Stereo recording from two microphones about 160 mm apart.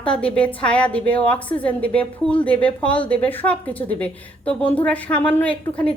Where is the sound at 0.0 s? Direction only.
5° left (ahead or behind).